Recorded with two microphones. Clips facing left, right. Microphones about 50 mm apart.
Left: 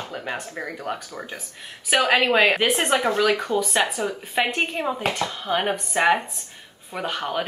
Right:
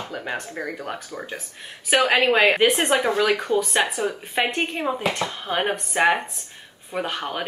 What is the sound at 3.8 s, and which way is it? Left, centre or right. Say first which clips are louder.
Speech: right 1 dB; right.